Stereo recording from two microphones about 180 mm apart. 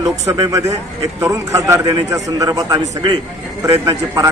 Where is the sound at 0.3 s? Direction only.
15° right (ahead or behind).